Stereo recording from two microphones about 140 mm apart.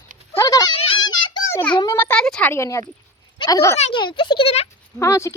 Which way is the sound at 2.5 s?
20° left (ahead or behind).